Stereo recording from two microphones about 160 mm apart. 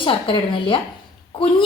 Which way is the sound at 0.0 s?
30° left (ahead or behind).